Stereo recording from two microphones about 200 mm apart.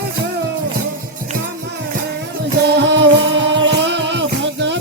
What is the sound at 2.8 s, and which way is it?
Music, 60° right (ahead or behind).